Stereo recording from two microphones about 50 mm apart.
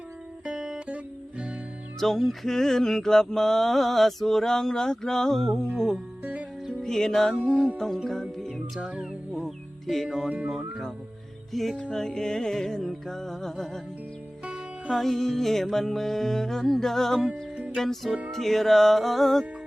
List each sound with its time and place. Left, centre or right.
0.4 s music: centre
2.0 s music: centre
8.8 s music: centre
9.4 s music: centre
10.4 s music: centre
11.5 s music: centre